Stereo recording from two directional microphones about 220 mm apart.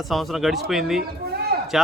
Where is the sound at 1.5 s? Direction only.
45° right (ahead or behind).